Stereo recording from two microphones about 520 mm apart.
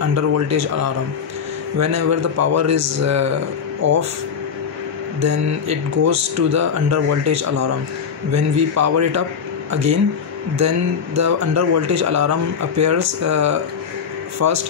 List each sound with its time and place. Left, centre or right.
0.1 s a man's voice: right
5.2 s speech: right
11.1 s speech: right